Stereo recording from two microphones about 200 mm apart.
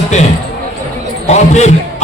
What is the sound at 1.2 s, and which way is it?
Speech, 35° left (ahead or behind).